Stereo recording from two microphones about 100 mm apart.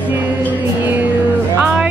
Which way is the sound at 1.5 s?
15° right (ahead or behind).